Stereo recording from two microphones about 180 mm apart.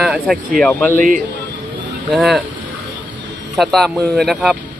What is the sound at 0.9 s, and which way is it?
Speech, 50° right (ahead or behind).